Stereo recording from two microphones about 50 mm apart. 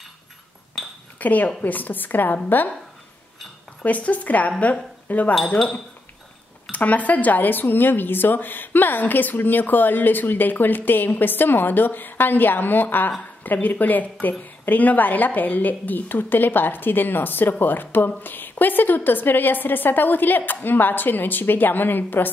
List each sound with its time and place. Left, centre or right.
0.8 s a sound: centre
1.2 s a woman's voice: left
3.8 s a woman's voice: left
6.7 s a woman's voice: left